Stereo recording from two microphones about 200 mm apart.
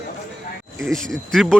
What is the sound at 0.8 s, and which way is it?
Speech, centre (ahead or behind).